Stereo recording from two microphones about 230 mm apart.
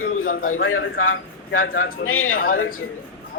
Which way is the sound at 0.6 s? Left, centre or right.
Left.